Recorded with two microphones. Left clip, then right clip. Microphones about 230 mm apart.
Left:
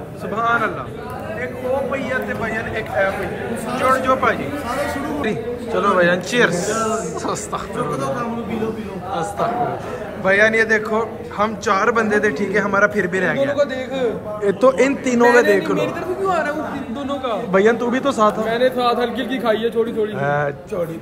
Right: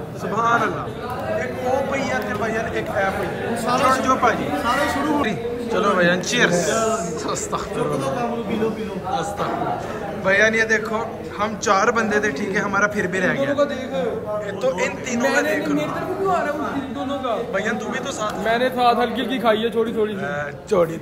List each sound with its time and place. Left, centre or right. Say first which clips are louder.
0.4 s a sound: even; centre
1.9 s a sound: left 1 dB; centre
3.6 s speech: left 1 dB; centre
5.2 s a man's voice: left 1 dB; centre
10.2 s a man's voice: left 2 dB; centre
14.4 s a man's voice: left 10 dB; centre
17.6 s a man's voice: left 8 dB; centre
18.4 s a man's voice: left 1 dB; centre
20.2 s a man's voice: left 6 dB; centre